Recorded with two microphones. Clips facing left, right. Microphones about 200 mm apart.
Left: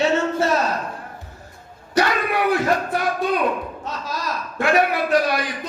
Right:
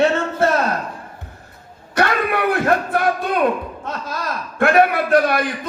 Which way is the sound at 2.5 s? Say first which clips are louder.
Right 2 dB; 55° right (ahead or behind).